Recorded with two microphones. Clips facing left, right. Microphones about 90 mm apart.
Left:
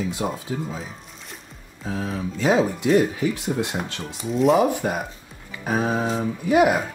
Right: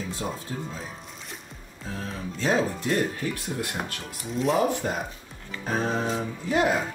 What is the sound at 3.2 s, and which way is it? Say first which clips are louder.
Speech: left 7 dB; 80° left.